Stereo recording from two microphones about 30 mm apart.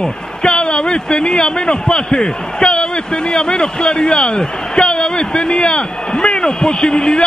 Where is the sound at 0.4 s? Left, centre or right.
Left.